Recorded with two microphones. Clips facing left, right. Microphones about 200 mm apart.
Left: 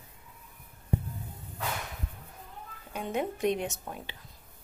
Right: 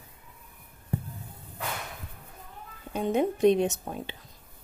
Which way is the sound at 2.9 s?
25° right (ahead or behind).